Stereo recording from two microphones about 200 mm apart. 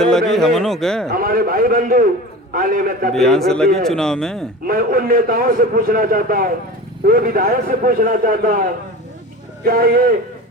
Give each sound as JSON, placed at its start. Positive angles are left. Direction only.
{"t": 0.0, "sound": "speech", "side_deg": 0}
{"t": 1.0, "sound": "a man's voice", "side_deg": -45}
{"t": 3.2, "sound": "speech", "side_deg": 0}
{"t": 4.6, "sound": "a man's voice", "side_deg": -45}
{"t": 9.6, "sound": "a man's voice", "side_deg": -45}